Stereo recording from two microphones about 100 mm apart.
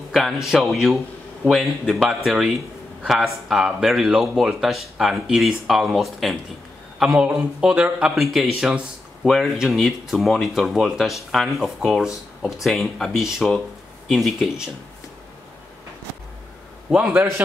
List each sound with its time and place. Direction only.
0.5 s speech: centre (ahead or behind)
16.9 s speech: 15° right (ahead or behind)